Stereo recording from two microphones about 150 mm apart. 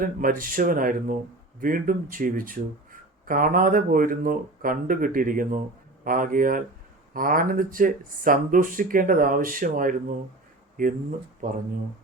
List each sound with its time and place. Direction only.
0.0 s speech: 65° right (ahead or behind)